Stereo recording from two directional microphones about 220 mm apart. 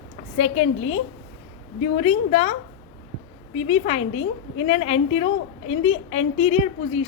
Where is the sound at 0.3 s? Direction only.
30° left (ahead or behind).